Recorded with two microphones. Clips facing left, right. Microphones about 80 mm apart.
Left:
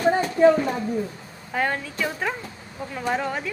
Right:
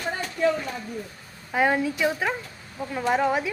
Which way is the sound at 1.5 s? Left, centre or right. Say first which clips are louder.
Right 3 dB; centre.